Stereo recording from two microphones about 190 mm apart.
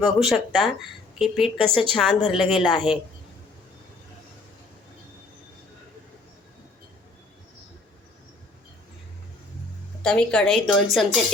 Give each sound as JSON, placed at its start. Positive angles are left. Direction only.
{"t": 0.0, "sound": "a woman's voice", "side_deg": 0}
{"t": 10.0, "sound": "a woman's voice", "side_deg": 5}